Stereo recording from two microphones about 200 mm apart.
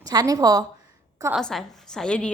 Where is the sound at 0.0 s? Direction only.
20° right (ahead or behind).